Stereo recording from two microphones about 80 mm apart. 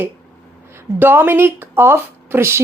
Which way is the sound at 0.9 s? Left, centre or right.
Right.